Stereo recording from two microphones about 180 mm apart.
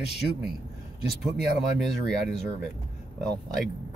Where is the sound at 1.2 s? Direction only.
Centre (ahead or behind).